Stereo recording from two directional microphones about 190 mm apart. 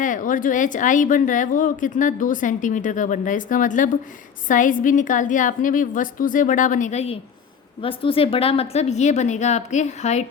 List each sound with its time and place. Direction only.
0.0 s a woman's voice: 45° left (ahead or behind)